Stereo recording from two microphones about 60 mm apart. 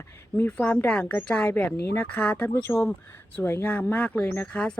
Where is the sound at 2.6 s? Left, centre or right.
Left.